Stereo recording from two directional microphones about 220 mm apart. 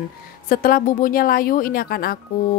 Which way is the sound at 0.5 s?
40° left (ahead or behind).